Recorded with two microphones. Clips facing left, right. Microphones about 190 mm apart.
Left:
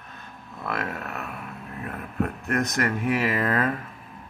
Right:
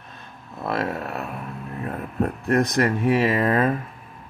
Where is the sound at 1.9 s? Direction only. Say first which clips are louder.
Right 3 dB; 30° right (ahead or behind).